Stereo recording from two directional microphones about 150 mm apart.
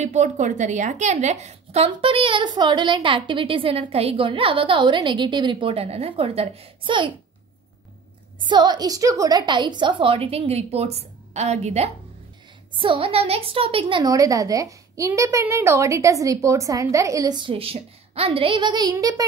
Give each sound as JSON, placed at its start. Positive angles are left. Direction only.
{"t": 0.0, "sound": "a woman's voice", "side_deg": -50}
{"t": 8.4, "sound": "a woman's voice", "side_deg": -30}
{"t": 12.7, "sound": "a woman's voice", "side_deg": -35}